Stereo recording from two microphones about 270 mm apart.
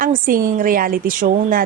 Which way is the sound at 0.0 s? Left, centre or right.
Right.